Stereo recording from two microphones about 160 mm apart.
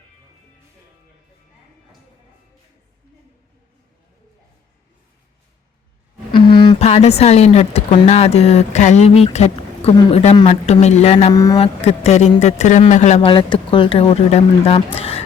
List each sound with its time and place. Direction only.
6.3 s a woman's voice: 30° left (ahead or behind); by 13.2 s 45° left (ahead or behind)
13.2 s speech: 30° left (ahead or behind)